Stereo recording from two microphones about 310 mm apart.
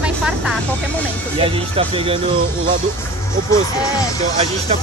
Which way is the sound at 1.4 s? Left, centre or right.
Centre.